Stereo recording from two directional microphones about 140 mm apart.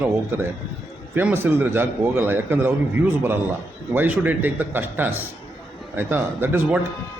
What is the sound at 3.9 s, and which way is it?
A man's voice, 15° right (ahead or behind).